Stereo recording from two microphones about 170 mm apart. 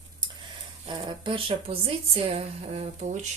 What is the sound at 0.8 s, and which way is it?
A woman's voice, 30° right (ahead or behind).